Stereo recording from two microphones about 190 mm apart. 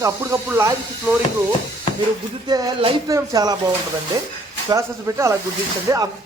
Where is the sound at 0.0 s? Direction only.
15° right (ahead or behind).